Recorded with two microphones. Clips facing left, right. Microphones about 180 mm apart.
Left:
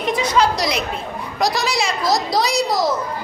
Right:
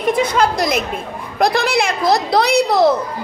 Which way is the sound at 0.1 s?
55° right (ahead or behind).